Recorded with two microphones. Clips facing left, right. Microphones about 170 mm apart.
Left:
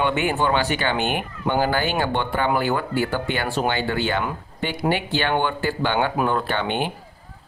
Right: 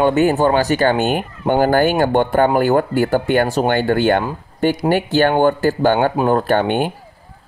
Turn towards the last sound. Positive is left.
turn(degrees=-45)  # may be behind; listen again after turning